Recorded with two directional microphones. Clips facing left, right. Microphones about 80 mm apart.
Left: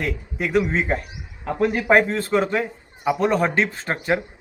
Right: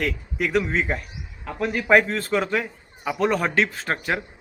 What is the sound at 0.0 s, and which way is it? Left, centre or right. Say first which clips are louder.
Speech: even; left.